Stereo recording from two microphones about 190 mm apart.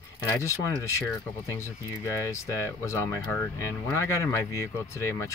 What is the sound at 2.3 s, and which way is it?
Speech, 15° left (ahead or behind).